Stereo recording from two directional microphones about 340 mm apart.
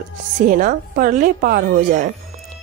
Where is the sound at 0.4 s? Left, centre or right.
Right.